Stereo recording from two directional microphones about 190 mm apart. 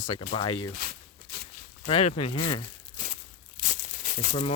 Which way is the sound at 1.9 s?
30° left (ahead or behind).